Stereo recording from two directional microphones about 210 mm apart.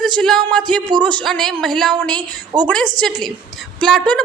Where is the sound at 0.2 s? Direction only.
Centre (ahead or behind).